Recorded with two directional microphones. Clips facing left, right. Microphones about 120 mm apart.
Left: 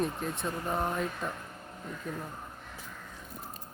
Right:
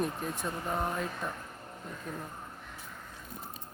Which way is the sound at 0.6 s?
5° left (ahead or behind).